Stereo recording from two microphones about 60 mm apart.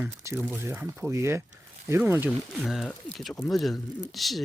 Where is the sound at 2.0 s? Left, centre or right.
Right.